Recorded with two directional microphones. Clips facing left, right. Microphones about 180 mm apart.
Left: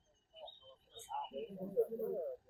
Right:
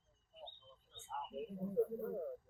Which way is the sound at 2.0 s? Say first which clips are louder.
Left 3 dB; 20° left (ahead or behind).